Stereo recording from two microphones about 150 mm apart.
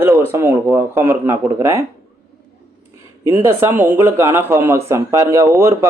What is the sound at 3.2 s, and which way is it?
Speech, 15° right (ahead or behind).